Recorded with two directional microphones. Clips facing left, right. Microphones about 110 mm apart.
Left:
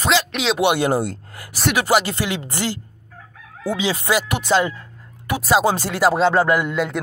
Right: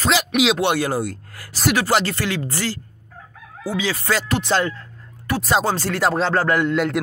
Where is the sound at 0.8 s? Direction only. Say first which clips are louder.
Left 3 dB; 25° left (ahead or behind); by 4.7 s 5° left (ahead or behind).